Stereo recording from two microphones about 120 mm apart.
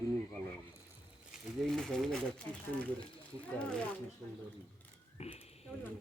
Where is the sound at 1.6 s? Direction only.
5° left (ahead or behind).